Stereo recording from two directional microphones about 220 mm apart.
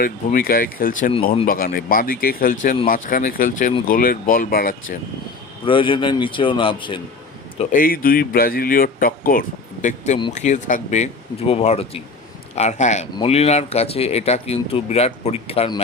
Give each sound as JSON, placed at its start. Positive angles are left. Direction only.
{"t": 0.0, "sound": "speech", "side_deg": 40}
{"t": 5.6, "sound": "speech", "side_deg": 25}
{"t": 7.6, "sound": "speech", "side_deg": 40}